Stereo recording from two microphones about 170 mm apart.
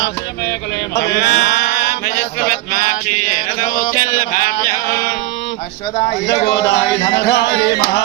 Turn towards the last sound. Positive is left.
turn(degrees=90)